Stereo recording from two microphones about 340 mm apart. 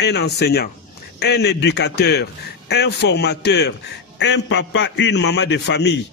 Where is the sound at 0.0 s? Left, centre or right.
Left.